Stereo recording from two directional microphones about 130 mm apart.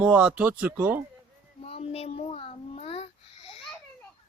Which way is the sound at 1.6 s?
50° left (ahead or behind).